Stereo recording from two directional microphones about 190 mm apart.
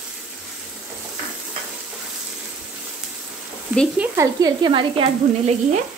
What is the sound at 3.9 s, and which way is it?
Sizzle, 15° right (ahead or behind).